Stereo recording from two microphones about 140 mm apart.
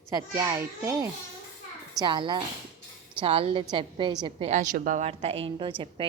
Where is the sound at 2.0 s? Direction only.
35° right (ahead or behind).